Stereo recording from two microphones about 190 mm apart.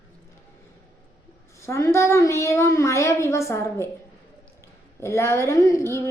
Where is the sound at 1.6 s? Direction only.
15° left (ahead or behind).